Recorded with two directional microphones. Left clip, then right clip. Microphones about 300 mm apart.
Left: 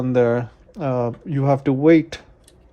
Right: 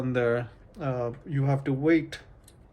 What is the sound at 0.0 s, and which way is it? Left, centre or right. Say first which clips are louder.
Speech: left 8 dB; centre.